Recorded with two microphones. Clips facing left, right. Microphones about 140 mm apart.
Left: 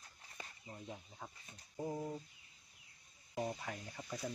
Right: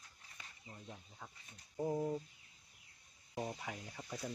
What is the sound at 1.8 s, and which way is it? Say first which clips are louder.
Speech: right 4 dB; 15° right (ahead or behind).